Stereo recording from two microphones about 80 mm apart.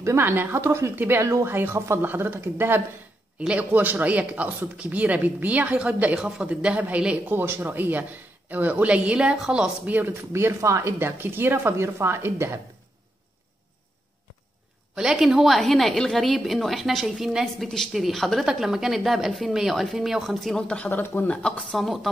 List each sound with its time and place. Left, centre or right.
0.0 s speech: right
3.3 s speech: centre
7.2 s speech: right; by 9.9 s centre
9.9 s speech: right
15.0 s a woman's voice: centre
20.9 s speech: left
21.3 s speech: centre
21.7 s a woman's voice: centre